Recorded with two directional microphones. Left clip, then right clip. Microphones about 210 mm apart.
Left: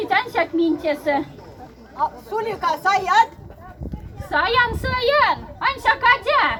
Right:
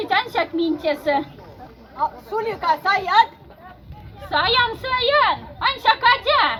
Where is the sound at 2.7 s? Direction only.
5° left (ahead or behind).